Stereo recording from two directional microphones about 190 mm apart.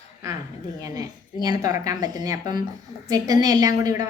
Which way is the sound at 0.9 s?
20° right (ahead or behind).